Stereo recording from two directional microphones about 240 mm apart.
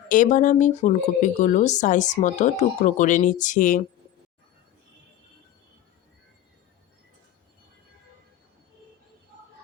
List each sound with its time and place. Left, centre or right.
0.1 s speech: left